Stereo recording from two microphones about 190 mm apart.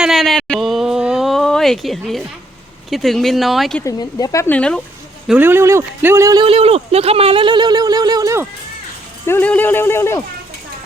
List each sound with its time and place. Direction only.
0.0 s a sound: centre (ahead or behind)
2.9 s speech: centre (ahead or behind)
3.8 s speech: 20° left (ahead or behind)
5.3 s speech: 10° right (ahead or behind)
9.2 s speech: 10° left (ahead or behind)